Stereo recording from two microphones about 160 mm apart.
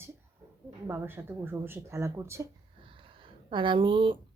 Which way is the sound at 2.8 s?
35° right (ahead or behind).